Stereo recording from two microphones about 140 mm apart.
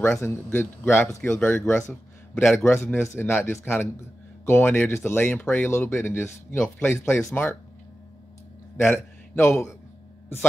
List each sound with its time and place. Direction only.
0.2 s a man's voice: 15° left (ahead or behind)
7.2 s speech: 5° left (ahead or behind)
8.8 s a man's voice: 15° left (ahead or behind)